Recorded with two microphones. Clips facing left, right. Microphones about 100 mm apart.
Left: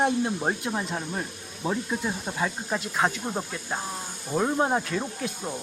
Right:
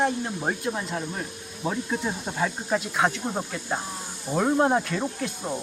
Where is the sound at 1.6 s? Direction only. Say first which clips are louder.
Even; centre (ahead or behind).